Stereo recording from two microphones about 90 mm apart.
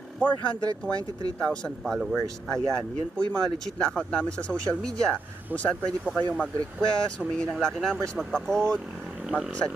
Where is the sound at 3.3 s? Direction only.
10° left (ahead or behind).